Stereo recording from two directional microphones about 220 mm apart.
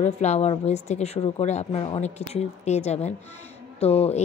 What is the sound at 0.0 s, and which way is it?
Speech, 30° left (ahead or behind).